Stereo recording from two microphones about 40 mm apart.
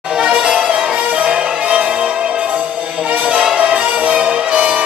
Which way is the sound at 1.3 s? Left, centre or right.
Right.